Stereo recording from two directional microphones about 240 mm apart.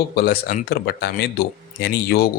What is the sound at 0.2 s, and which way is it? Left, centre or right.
Speech, left.